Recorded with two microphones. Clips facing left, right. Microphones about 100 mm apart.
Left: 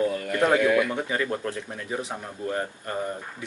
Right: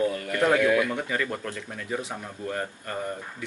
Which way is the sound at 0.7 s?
Centre (ahead or behind).